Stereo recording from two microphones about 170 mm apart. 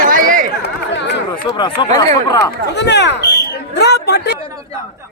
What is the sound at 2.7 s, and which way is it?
Speech, 90° left.